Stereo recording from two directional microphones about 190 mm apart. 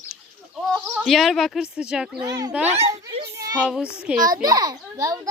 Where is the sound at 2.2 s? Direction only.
20° right (ahead or behind).